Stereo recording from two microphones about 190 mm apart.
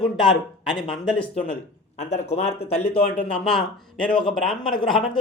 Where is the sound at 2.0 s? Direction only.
35° left (ahead or behind).